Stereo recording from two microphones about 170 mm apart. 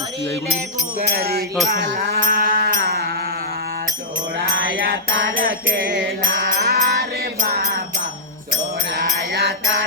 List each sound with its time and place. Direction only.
1.1 s music: 65° right (ahead or behind)
4.4 s music: 90° right; by 7.5 s 60° right (ahead or behind)
8.9 s music: 60° right (ahead or behind)